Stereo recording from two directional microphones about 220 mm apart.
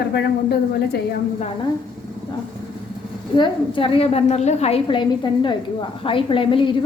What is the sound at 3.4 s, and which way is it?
A woman's voice, 25° left (ahead or behind).